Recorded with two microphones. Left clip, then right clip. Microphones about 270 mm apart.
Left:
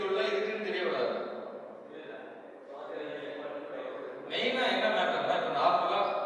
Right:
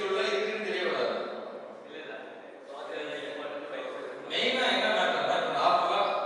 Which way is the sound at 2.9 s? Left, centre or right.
Centre.